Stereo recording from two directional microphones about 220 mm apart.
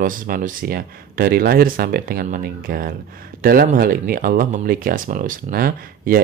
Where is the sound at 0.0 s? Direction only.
40° right (ahead or behind).